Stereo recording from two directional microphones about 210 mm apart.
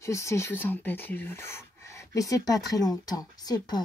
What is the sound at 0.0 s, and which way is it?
Speech, 15° left (ahead or behind).